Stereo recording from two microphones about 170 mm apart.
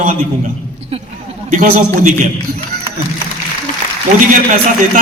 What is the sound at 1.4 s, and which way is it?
Speech, 50° right (ahead or behind).